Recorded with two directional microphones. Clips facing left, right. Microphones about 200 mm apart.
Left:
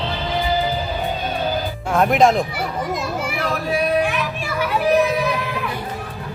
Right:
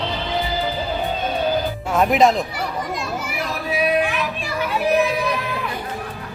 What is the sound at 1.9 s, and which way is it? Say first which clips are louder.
Speech: left 1 dB; centre (ahead or behind).